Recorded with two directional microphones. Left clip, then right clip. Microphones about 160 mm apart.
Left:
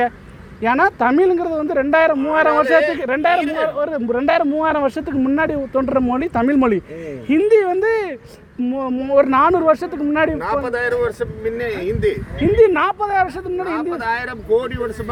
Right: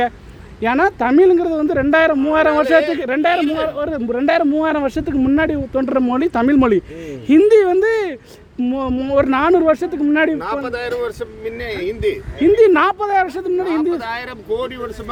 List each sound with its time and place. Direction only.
0.6 s speech: 40° right (ahead or behind)
2.6 s speech: 15° right (ahead or behind)
3.0 s speech: 60° right (ahead or behind)
3.7 s speech: 45° right (ahead or behind)
5.1 s speech: 45° right (ahead or behind)
8.6 s speech: 55° right (ahead or behind); by 10.3 s 40° right (ahead or behind)
10.4 s speech: 20° right (ahead or behind)
12.5 s speech: 45° right (ahead or behind)
13.9 s speech: 20° right (ahead or behind)